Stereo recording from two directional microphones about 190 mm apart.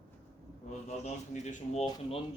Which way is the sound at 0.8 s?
35° left (ahead or behind).